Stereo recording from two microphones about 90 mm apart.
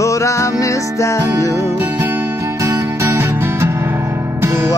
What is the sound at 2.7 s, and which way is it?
Music, 30° right (ahead or behind).